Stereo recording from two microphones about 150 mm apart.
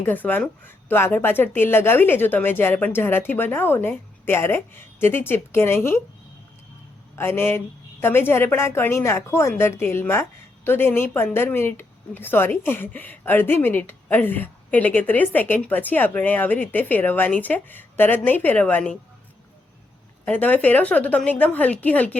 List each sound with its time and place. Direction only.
0.0 s a woman's voice: 10° left (ahead or behind)
7.2 s a woman's voice: 15° left (ahead or behind)
20.2 s a woman's voice: 10° left (ahead or behind)